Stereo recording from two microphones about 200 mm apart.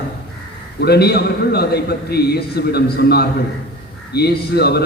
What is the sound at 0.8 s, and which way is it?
A man's voice, 55° left (ahead or behind).